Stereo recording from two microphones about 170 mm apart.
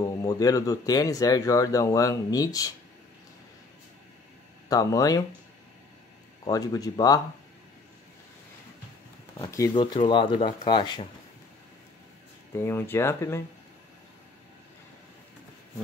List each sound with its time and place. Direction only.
0.0 s speech: 20° left (ahead or behind)
4.6 s speech: 20° left (ahead or behind)
6.4 s speech: 20° left (ahead or behind)
9.4 s speech: 20° left (ahead or behind)
12.5 s speech: 15° left (ahead or behind)